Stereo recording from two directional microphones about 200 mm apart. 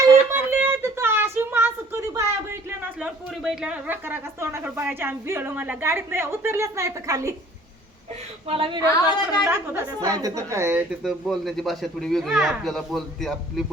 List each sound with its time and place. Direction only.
0.0 s a sound: 15° right (ahead or behind)
8.4 s a woman's voice: 25° right (ahead or behind)
9.0 s a woman's voice: 10° right (ahead or behind)
11.0 s speech: centre (ahead or behind)